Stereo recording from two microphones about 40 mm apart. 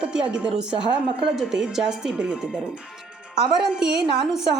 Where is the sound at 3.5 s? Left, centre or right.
Centre.